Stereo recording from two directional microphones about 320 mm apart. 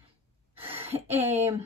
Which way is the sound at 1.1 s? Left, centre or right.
Centre.